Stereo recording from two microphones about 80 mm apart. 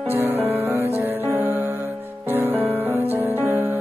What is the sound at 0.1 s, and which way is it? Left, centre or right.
Music, right.